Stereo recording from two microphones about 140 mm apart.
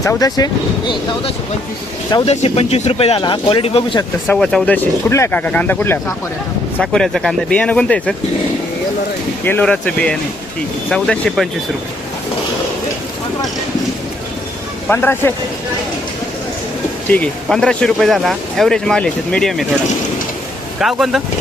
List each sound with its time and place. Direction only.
0.0 s speech: 25° left (ahead or behind)
2.2 s speech: 50° left (ahead or behind)
3.2 s speech: 35° left (ahead or behind)
4.3 s speech: 5° left (ahead or behind)
6.7 s speech: 5° left (ahead or behind)
9.4 s speech: 15° left (ahead or behind)
14.8 s speech: 15° left (ahead or behind)
17.1 s speech: 10° left (ahead or behind)
20.8 s speech: centre (ahead or behind)